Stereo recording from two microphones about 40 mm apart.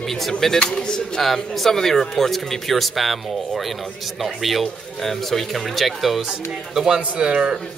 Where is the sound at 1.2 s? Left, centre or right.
Centre.